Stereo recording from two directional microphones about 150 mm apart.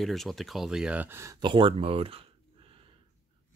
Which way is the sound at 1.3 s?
35° right (ahead or behind).